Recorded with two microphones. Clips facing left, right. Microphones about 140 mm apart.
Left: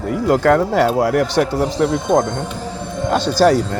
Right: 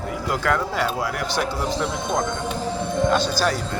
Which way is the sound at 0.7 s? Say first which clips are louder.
Left 10 dB; 80° left.